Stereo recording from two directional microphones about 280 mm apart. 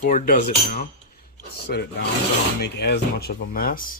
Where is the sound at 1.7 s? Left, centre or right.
Left.